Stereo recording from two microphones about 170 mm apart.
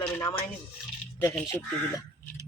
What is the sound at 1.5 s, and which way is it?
Speech, 15° left (ahead or behind).